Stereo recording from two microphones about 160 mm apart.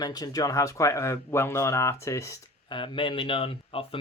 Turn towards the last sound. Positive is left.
turn(degrees=35)  # may be behind; listen again after turning